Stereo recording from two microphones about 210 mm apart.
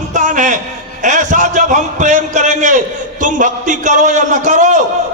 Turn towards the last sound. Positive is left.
turn(degrees=-35)  # may be behind; listen again after turning